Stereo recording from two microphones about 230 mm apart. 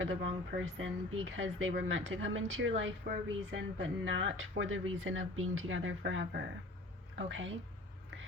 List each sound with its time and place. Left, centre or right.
0.0 s speech: right